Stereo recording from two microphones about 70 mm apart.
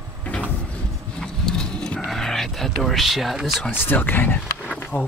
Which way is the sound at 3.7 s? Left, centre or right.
Left.